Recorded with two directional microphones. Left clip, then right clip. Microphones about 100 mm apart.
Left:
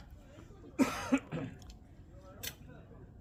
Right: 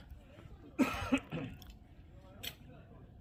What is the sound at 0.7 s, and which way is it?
Cough, 85° right.